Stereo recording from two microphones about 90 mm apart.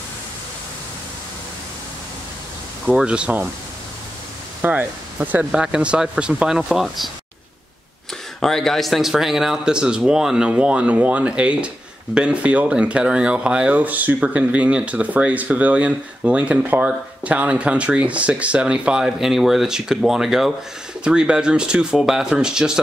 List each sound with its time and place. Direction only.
3.0 s speech: 10° right (ahead or behind)
4.6 s speech: 20° right (ahead or behind)
8.4 s speech: 5° left (ahead or behind)